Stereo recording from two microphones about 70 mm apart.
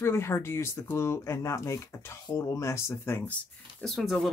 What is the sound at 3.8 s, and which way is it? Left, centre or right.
Speech, centre.